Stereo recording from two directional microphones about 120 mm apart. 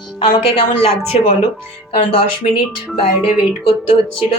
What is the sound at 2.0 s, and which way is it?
Speech, 50° left (ahead or behind).